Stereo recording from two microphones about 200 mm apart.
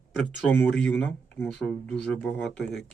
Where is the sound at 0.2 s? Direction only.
10° left (ahead or behind).